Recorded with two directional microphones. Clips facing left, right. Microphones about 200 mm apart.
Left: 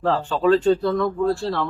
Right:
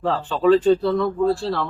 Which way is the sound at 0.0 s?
Centre (ahead or behind).